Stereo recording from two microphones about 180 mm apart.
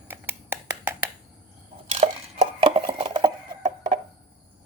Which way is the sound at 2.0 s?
40° right (ahead or behind).